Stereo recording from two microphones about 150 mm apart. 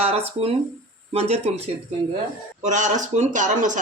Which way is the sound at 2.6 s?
55° right (ahead or behind).